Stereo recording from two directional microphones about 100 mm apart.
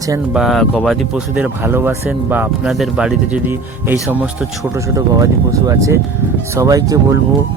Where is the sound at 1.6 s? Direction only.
20° right (ahead or behind).